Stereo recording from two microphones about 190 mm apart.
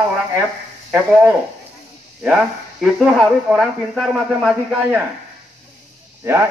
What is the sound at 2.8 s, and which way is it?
Speech, centre (ahead or behind).